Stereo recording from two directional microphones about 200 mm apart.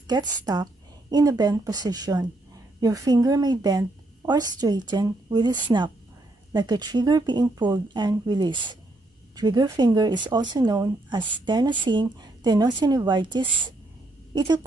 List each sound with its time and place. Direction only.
0.0 s speech: 20° right (ahead or behind)